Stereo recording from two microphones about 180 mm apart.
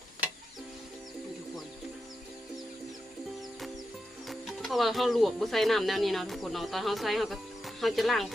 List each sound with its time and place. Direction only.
4.3 s speech: centre (ahead or behind)